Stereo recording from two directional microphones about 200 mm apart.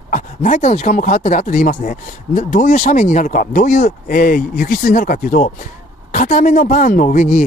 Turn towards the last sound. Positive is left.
turn(degrees=40)  # may be behind; listen again after turning